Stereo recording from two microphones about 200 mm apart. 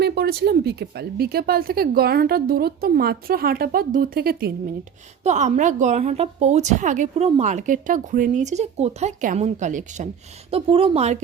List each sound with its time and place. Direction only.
0.0 s speech: 55° right (ahead or behind)
5.2 s a woman's voice: 35° right (ahead or behind)
10.5 s speech: 25° right (ahead or behind)